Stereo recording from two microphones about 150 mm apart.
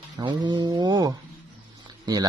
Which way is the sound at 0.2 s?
30° right (ahead or behind).